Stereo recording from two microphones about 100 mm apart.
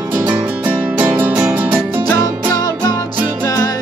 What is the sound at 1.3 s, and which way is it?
Music, 20° right (ahead or behind).